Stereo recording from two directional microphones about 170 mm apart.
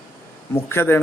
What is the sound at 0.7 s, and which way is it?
Speech, 15° left (ahead or behind).